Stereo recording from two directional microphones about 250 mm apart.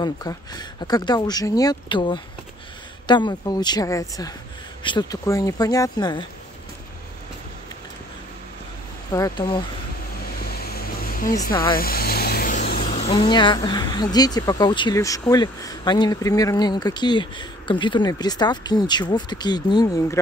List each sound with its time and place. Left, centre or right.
0.0 s speech: centre
9.1 s speech: centre
10.4 s a sound: left
11.7 s speech: left; by 20.2 s centre